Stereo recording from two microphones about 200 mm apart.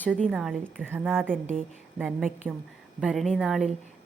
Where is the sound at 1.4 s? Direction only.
40° right (ahead or behind).